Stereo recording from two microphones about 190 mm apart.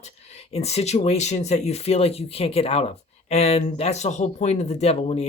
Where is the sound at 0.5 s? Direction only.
35° left (ahead or behind).